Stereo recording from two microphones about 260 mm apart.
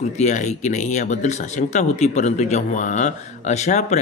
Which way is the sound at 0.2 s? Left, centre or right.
Left.